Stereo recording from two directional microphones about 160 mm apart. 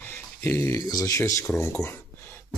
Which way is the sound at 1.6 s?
15° left (ahead or behind).